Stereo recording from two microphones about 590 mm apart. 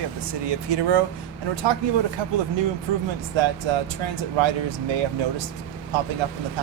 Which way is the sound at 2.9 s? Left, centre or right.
Right.